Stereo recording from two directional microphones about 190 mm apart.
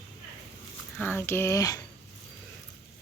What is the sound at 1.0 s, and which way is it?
Speech, 10° left (ahead or behind).